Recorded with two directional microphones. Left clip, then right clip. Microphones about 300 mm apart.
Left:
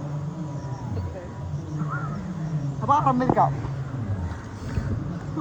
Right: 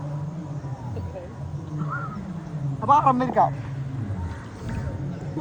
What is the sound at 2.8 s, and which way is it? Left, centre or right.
Speech, centre.